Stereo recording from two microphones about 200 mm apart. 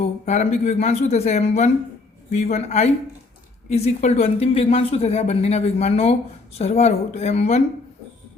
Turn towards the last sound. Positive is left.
turn(degrees=35)  # may be behind; listen again after turning